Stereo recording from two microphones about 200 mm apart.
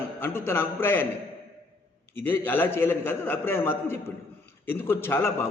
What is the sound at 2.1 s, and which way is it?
A man's voice, 10° left (ahead or behind).